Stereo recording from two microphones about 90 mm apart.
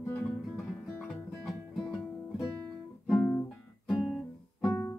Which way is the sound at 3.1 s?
15° left (ahead or behind).